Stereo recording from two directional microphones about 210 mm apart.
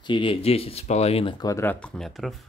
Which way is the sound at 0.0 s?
25° left (ahead or behind).